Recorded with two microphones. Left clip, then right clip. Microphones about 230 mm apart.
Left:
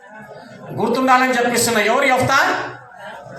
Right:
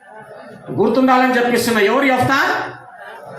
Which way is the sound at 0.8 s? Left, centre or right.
Left.